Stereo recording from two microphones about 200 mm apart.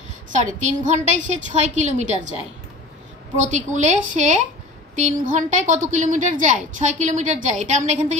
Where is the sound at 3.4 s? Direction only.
35° right (ahead or behind).